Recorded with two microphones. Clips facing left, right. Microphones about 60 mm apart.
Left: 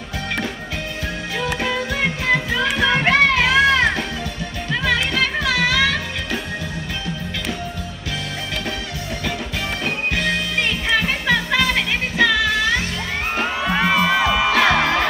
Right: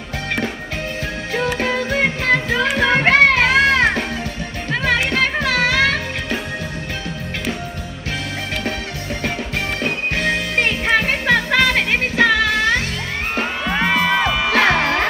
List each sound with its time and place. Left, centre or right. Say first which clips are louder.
1.6 s music: right 2 dB; right
10.1 s music: right 3 dB; right
13.4 s music: even; centre
14.7 s music: even; right